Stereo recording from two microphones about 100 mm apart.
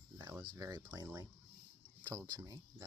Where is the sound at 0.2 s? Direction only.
30° right (ahead or behind).